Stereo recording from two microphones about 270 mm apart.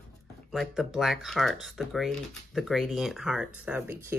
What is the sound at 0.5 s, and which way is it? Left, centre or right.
Speech, centre.